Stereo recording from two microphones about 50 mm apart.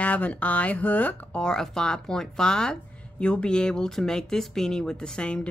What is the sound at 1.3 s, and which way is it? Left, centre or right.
Speech, centre.